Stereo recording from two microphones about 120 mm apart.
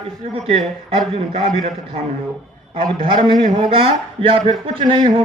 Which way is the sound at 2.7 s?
50° right (ahead or behind).